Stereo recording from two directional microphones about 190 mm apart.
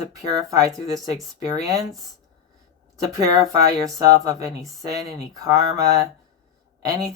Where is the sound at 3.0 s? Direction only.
15° right (ahead or behind).